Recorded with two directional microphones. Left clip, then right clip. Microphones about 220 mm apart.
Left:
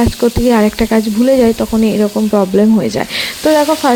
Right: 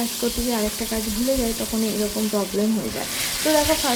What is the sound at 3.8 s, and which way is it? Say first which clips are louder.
Speech: left 12 dB; 45° left (ahead or behind).